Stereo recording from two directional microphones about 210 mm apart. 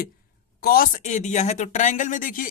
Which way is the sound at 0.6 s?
45° left (ahead or behind).